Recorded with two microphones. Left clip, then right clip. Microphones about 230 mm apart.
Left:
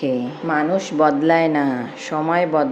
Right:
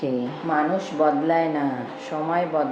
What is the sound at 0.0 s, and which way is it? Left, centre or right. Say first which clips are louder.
Speech: left 4 dB; left.